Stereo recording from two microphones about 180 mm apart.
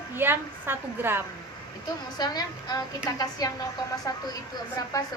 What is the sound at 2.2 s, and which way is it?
A woman's voice, 20° left (ahead or behind).